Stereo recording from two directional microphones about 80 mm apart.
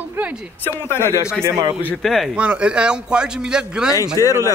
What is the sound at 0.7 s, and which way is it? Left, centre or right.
Speech, left.